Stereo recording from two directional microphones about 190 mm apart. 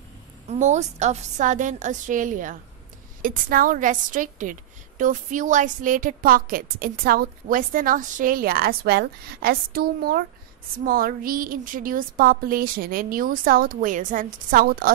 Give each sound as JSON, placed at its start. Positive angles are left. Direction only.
{"t": 0.5, "sound": "a woman's voice", "side_deg": -40}